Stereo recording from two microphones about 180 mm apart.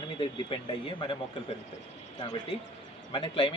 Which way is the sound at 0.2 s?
30° left (ahead or behind).